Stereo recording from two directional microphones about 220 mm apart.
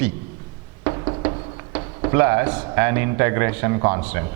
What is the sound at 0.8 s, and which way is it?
Music, 20° right (ahead or behind).